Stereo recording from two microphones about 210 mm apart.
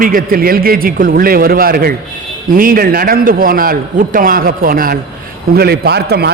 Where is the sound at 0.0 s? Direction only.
40° right (ahead or behind).